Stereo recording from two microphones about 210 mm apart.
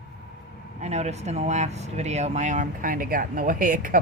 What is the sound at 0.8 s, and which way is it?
Speech, 30° right (ahead or behind).